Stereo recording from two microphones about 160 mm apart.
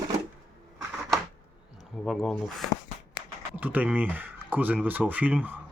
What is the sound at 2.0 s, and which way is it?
Speech, centre (ahead or behind).